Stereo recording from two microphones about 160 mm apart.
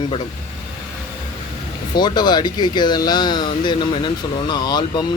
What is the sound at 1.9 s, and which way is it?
Speech, 25° left (ahead or behind).